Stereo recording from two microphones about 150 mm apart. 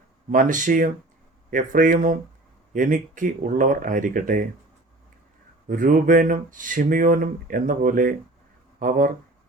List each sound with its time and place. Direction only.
0.3 s speech: 60° right (ahead or behind)
5.6 s speech: 65° right (ahead or behind)